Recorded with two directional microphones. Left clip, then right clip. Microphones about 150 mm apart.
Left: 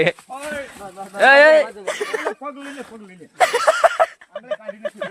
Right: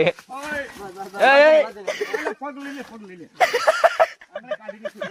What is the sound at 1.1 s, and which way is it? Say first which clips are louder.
A man's voice: left 3 dB; 35° left (ahead or behind).